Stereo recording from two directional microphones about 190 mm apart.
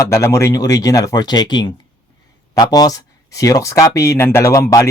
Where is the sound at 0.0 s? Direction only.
15° left (ahead or behind).